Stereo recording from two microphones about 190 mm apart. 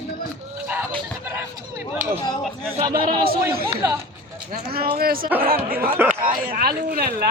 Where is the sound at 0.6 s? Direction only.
10° right (ahead or behind).